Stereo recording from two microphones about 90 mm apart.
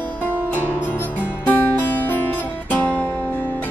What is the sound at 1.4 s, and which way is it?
Music, 20° left (ahead or behind).